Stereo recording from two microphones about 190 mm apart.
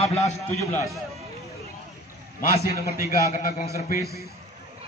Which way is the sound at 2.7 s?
50° left (ahead or behind).